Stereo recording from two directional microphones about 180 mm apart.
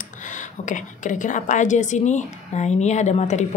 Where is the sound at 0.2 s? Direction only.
45° left (ahead or behind).